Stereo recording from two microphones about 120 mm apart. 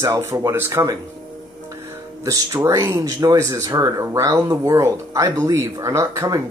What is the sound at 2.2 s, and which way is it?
Speech, 30° right (ahead or behind).